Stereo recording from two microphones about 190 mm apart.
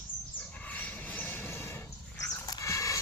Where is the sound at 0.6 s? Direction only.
10° left (ahead or behind).